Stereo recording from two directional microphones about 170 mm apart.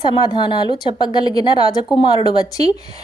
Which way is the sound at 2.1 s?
35° right (ahead or behind).